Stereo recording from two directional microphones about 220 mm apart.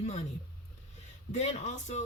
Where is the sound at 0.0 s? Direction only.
30° left (ahead or behind).